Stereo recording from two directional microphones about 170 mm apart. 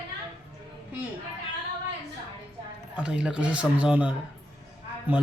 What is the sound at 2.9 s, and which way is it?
A man's voice, 5° right (ahead or behind).